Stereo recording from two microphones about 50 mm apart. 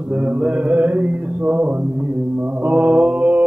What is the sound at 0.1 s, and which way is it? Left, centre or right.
Mantra, right.